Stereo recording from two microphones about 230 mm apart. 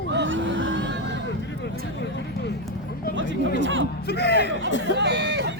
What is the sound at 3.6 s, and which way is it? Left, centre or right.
Music, right.